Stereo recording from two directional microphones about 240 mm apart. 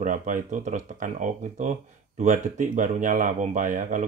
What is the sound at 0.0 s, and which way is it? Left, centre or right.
Speech, right.